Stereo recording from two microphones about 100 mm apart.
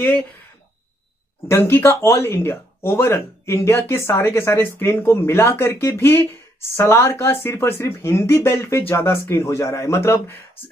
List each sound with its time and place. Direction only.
0.0 s speech: 15° left (ahead or behind)
1.5 s speech: 25° left (ahead or behind)